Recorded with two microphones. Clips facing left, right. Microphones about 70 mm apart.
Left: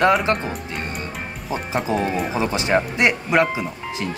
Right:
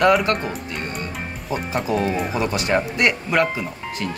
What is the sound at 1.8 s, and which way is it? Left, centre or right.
Speech, left.